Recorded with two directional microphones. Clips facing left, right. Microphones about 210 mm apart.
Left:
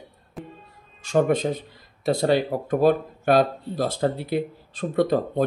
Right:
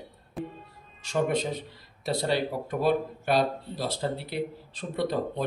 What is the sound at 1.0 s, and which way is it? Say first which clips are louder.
Speech: left 6 dB; 50° left (ahead or behind).